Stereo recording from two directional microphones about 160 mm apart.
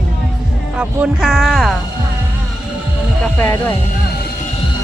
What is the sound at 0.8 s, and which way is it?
Speech, 5° right (ahead or behind).